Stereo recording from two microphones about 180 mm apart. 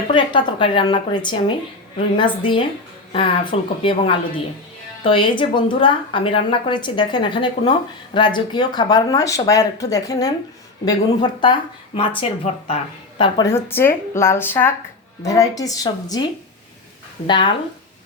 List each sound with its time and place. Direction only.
0.1 s speech: 25° left (ahead or behind)
13.5 s speech: 15° left (ahead or behind)
17.2 s speech: 25° left (ahead or behind)